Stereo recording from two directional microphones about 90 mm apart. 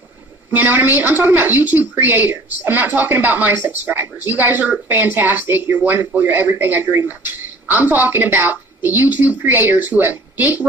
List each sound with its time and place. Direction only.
0.5 s a woman's voice: 20° right (ahead or behind)